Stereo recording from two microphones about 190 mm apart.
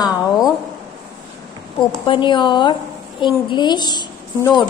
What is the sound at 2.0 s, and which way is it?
A woman's voice, 25° left (ahead or behind).